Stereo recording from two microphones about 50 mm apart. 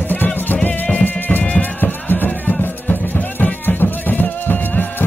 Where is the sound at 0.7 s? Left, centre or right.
Left.